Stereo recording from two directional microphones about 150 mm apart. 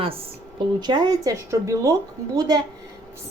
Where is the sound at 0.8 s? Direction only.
30° right (ahead or behind).